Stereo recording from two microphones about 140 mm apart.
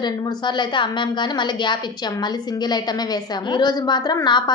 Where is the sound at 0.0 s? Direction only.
30° left (ahead or behind).